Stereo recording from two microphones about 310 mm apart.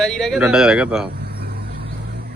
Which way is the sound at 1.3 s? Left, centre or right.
Right.